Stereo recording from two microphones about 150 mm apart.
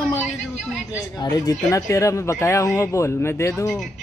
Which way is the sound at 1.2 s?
25° left (ahead or behind).